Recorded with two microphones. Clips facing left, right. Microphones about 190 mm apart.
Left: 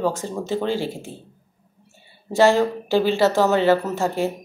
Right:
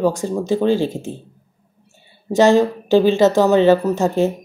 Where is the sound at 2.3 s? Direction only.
20° right (ahead or behind).